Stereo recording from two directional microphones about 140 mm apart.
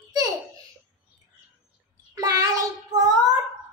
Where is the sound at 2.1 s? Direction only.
25° right (ahead or behind).